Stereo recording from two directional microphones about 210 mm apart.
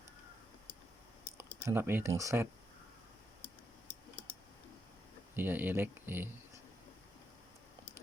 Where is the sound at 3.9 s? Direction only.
10° left (ahead or behind).